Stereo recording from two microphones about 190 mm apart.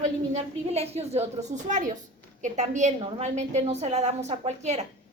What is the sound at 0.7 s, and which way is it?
A woman's voice, 35° right (ahead or behind).